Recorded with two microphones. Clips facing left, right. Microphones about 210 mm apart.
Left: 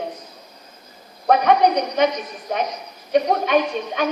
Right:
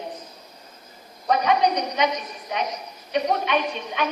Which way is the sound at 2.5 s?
50° left (ahead or behind).